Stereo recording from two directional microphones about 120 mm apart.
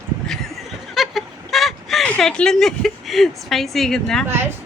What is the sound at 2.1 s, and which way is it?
A woman's voice, 5° left (ahead or behind).